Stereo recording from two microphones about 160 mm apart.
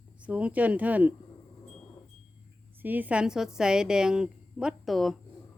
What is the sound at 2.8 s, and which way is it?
A woman's voice, 10° right (ahead or behind).